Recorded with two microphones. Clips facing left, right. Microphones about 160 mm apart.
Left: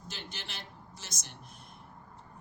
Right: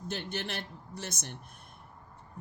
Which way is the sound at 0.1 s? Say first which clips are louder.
Right 9 dB; 55° right (ahead or behind).